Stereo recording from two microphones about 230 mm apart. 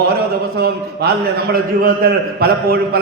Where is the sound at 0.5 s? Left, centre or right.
Right.